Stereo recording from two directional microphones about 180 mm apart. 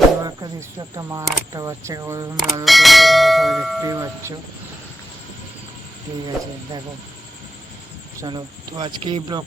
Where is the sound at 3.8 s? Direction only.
15° right (ahead or behind).